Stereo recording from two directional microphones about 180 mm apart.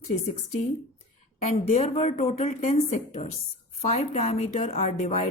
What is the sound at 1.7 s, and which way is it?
A woman's voice, 35° left (ahead or behind).